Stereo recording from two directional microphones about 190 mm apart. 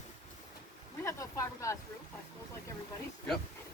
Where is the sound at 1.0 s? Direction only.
15° left (ahead or behind).